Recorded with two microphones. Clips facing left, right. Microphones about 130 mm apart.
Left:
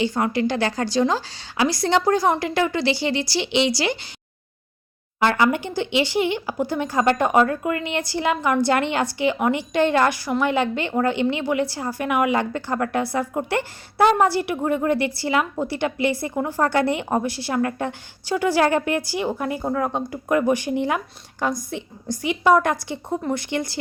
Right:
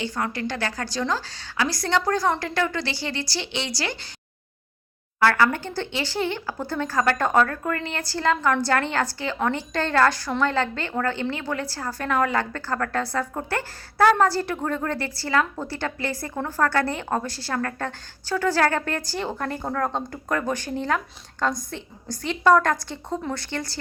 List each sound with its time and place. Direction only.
0.0 s a woman's voice: 15° left (ahead or behind)
5.2 s a woman's voice: 20° left (ahead or behind)